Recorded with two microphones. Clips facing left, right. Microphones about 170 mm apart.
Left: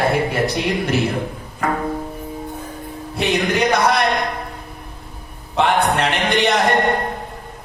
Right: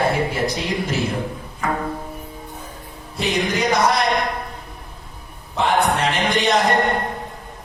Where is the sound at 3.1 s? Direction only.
65° left (ahead or behind).